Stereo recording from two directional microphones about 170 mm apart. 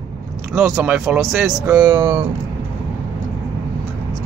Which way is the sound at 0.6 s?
15° right (ahead or behind).